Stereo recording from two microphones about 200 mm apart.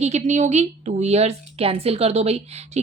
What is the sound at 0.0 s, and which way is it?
A woman's voice, 35° right (ahead or behind).